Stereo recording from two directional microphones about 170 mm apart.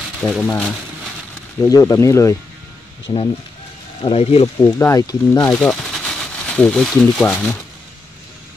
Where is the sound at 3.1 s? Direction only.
30° left (ahead or behind).